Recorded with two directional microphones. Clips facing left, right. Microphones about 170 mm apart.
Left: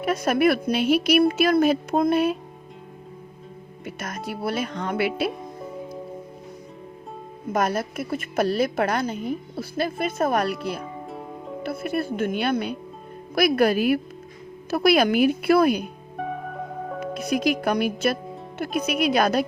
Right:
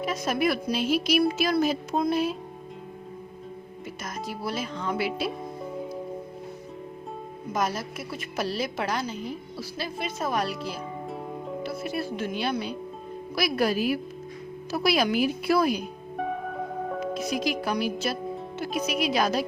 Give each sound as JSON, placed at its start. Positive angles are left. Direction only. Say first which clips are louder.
{"t": 0.0, "sound": "a woman's voice", "louder": "left 6 dB", "side_deg": 60}
{"t": 3.8, "sound": "a woman's voice", "louder": "left 3 dB", "side_deg": 65}
{"t": 7.5, "sound": "a woman's voice", "louder": "left 5 dB", "side_deg": 60}
{"t": 11.1, "sound": "music", "louder": "right 1 dB", "side_deg": 0}
{"t": 11.6, "sound": "a woman's voice", "louder": "left 6 dB", "side_deg": 55}
{"t": 16.1, "sound": "music", "louder": "even", "side_deg": 0}
{"t": 17.2, "sound": "a woman's voice", "louder": "left 8 dB", "side_deg": 55}